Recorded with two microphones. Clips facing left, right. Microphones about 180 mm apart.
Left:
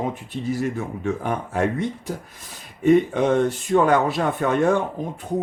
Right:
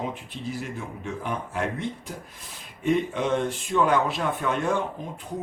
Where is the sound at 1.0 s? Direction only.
45° left (ahead or behind).